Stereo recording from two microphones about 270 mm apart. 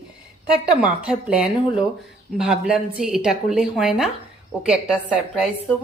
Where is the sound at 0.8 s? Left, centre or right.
Centre.